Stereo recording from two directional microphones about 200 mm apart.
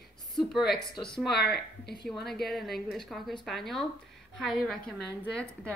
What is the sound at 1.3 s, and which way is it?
Speech, 55° left (ahead or behind).